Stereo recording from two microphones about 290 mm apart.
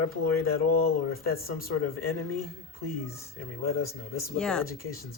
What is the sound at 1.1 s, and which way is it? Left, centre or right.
Speech, left.